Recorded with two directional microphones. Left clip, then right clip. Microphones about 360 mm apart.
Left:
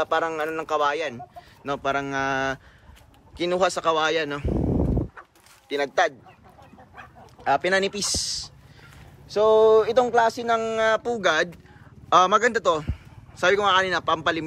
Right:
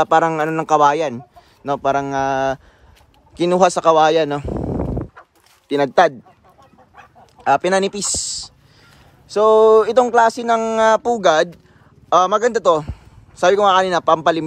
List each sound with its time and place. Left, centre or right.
0.0 s speech: centre
4.6 s a sound: left
5.7 s speech: centre
7.4 s speech: centre